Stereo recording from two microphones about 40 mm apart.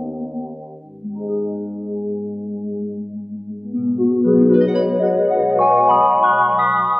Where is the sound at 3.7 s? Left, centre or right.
Centre.